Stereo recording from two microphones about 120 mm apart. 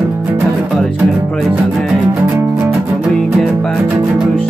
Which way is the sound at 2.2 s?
15° right (ahead or behind).